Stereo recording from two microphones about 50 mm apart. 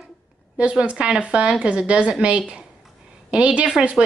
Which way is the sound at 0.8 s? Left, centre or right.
Right.